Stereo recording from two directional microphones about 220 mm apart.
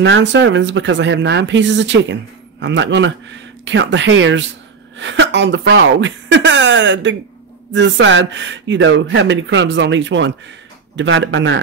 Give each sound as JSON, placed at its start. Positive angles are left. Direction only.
{"t": 0.0, "sound": "speech", "side_deg": -55}